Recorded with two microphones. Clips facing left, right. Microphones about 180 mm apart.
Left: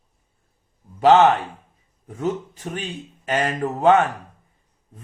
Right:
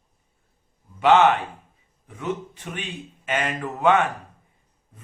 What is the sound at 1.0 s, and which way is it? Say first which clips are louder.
Speech: left 3 dB; 35° left (ahead or behind).